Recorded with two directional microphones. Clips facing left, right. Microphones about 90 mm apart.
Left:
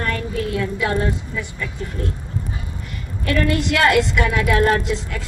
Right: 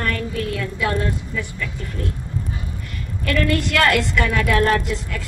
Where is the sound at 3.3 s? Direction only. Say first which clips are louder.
Left 1 dB; 20° left (ahead or behind).